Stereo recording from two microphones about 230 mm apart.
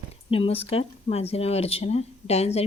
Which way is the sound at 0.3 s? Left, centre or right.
Left.